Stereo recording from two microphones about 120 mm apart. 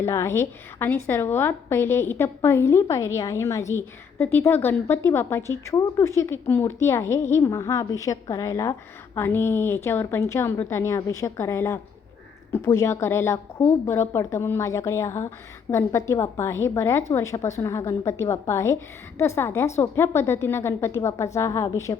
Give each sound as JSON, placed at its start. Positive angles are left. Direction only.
{"t": 0.0, "sound": "a woman's voice", "side_deg": 20}
{"t": 4.2, "sound": "a woman's voice", "side_deg": 15}